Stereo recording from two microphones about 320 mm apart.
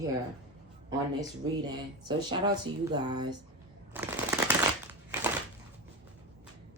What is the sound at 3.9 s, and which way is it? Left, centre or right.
Shuffling cards, centre.